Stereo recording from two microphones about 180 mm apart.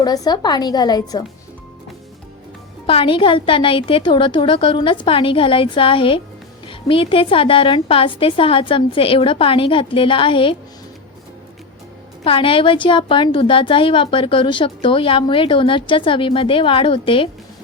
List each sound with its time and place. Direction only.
0.0 s a woman's voice: 20° left (ahead or behind)
2.8 s a woman's voice: 30° left (ahead or behind)
12.2 s a woman's voice: 30° left (ahead or behind)